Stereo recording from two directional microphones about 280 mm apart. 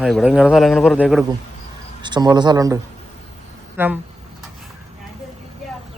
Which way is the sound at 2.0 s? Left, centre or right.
Centre.